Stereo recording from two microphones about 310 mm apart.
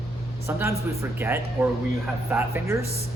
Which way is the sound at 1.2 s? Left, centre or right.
Centre.